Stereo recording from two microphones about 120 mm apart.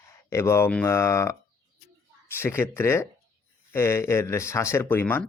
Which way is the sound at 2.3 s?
20° left (ahead or behind).